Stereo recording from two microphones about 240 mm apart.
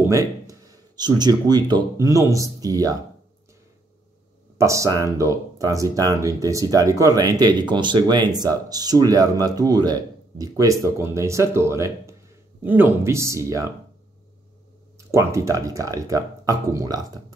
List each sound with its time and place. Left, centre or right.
0.0 s speech: centre
4.6 s speech: centre
15.0 s speech: centre